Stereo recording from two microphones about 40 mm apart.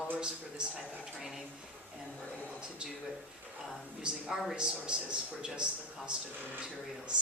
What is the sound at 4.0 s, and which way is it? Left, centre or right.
Speech, right.